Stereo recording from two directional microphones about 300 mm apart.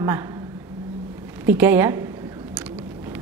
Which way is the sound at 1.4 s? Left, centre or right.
Centre.